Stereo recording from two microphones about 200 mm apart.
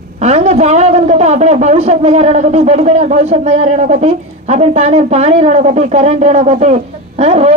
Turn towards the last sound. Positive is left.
turn(degrees=-30)  # may be behind; listen again after turning